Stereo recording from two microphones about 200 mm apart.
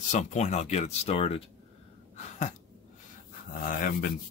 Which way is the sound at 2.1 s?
35° left (ahead or behind).